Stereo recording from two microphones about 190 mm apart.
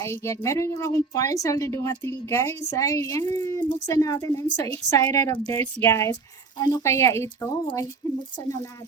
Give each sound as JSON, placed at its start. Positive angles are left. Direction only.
{"t": 0.0, "sound": "a woman's voice", "side_deg": 15}